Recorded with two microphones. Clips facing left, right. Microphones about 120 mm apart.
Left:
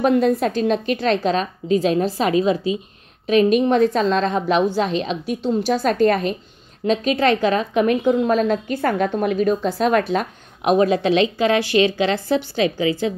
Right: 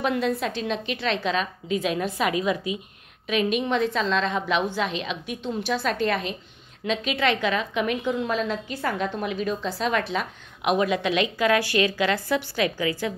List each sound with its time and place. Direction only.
0.0 s a woman's voice: 45° left (ahead or behind); by 13.1 s 25° left (ahead or behind)